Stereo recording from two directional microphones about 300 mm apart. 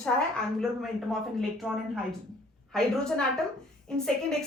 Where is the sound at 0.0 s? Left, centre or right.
Centre.